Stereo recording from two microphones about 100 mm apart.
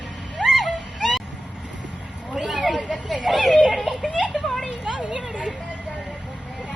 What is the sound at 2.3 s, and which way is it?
Children playing, centre (ahead or behind).